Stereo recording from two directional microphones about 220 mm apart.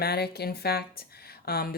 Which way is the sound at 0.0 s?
45° left (ahead or behind).